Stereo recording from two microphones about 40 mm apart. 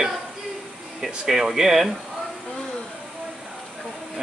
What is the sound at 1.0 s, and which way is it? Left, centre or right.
Speech, centre.